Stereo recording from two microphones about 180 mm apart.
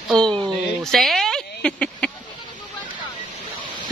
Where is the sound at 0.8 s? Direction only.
Centre (ahead or behind).